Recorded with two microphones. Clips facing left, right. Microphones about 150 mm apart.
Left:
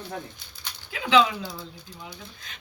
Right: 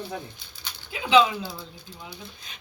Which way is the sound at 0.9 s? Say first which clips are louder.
Right 1 dB; 20° right (ahead or behind).